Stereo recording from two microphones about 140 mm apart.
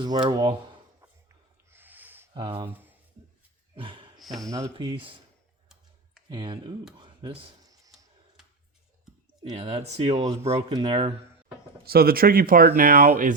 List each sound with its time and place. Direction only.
0.0 s speech: 35° right (ahead or behind)
1.0 s a sound: 15° right (ahead or behind)
2.3 s speech: 40° right (ahead or behind)
3.8 s a sound: 35° right (ahead or behind)
4.2 s speech: centre (ahead or behind)
4.5 s speech: 25° right (ahead or behind)
6.2 s speech: 35° right (ahead or behind)
9.4 s speech: 45° right (ahead or behind)
10.7 s speech: 30° right (ahead or behind)
11.9 s speech: 90° right; by 13.3 s 70° right (ahead or behind)